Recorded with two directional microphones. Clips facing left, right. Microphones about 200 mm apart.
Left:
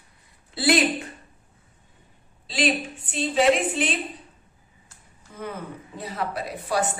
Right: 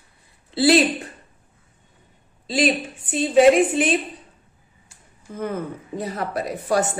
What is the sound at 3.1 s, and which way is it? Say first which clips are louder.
Speech: right 6 dB; 50° right (ahead or behind).